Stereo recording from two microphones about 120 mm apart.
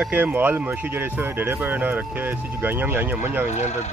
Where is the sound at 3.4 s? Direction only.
75° left (ahead or behind).